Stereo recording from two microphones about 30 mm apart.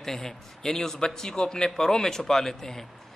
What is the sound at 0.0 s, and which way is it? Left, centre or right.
A man's voice, centre.